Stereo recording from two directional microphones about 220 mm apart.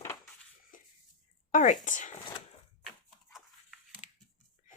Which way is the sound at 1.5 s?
35° left (ahead or behind).